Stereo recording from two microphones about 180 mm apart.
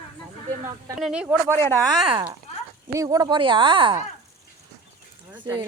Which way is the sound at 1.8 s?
25° right (ahead or behind).